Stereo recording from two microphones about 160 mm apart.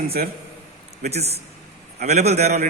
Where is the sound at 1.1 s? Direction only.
40° right (ahead or behind).